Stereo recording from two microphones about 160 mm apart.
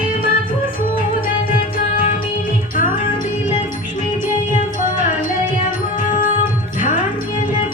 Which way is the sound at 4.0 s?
50° left (ahead or behind).